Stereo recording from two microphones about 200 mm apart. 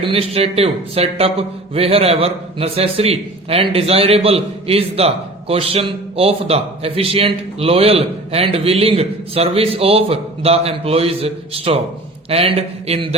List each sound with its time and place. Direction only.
0.0 s a man's voice: 30° right (ahead or behind)